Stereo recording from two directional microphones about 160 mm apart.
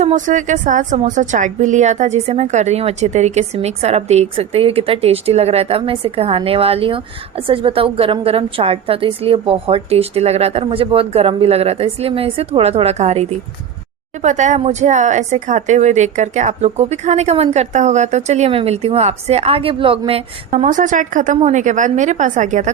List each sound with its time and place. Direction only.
0.0 s a woman's voice: 50° right (ahead or behind)
20.5 s speech: 50° right (ahead or behind)